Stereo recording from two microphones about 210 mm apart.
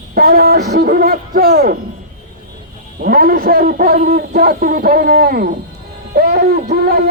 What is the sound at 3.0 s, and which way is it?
A man's voice, 45° right (ahead or behind).